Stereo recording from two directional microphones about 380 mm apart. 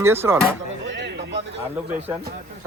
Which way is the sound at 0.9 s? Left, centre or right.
Right.